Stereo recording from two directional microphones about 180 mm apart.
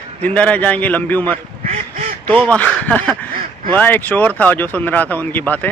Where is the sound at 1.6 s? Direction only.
40° right (ahead or behind).